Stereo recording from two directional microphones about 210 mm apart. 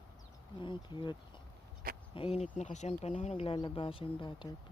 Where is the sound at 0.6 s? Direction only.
25° left (ahead or behind).